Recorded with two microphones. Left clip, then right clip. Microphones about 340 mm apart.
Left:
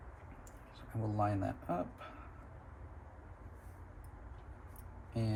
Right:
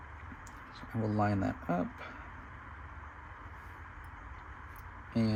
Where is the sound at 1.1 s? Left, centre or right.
Right.